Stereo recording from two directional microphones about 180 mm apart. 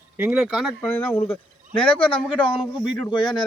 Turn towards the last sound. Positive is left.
turn(degrees=25)  # may be behind; listen again after turning